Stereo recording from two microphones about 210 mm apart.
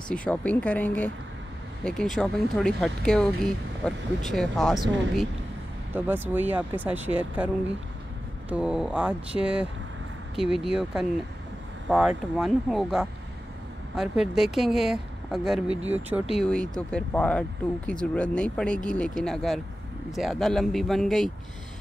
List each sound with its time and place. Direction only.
0.1 s speech: 5° left (ahead or behind)
5.9 s speech: 10° right (ahead or behind)
8.5 s speech: 5° right (ahead or behind)